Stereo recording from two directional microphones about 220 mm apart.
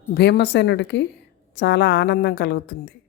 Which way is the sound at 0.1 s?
50° left (ahead or behind).